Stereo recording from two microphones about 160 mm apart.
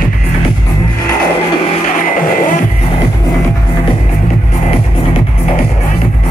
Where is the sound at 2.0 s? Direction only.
55° left (ahead or behind).